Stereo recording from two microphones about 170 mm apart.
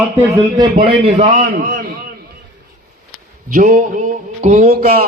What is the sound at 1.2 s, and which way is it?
Speech, 50° right (ahead or behind).